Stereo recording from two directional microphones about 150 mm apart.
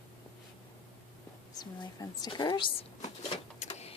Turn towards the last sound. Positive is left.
turn(degrees=45)  # may be behind; listen again after turning